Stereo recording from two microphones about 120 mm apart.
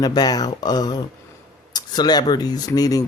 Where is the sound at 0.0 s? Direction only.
35° left (ahead or behind).